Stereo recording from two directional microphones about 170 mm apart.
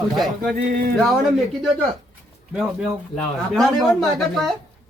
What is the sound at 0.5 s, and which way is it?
Music, 60° right (ahead or behind).